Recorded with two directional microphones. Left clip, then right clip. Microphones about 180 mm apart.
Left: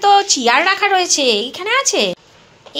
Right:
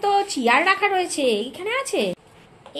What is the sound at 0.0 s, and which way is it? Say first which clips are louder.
A woman's voice: left 8 dB; centre (ahead or behind).